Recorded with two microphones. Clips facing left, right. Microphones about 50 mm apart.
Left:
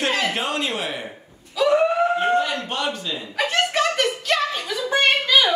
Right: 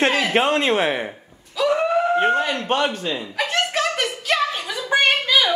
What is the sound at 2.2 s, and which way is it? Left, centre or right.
Speech, right.